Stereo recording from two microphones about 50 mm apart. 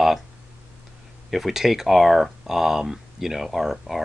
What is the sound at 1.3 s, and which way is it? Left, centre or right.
Speech, centre.